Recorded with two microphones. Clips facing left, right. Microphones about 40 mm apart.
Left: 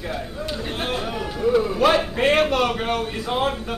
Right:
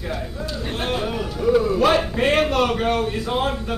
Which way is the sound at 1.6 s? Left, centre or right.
Centre.